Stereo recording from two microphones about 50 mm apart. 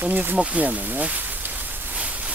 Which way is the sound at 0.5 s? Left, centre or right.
Right.